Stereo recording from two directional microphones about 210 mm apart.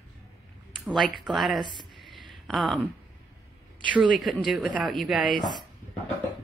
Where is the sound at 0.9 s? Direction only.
Centre (ahead or behind).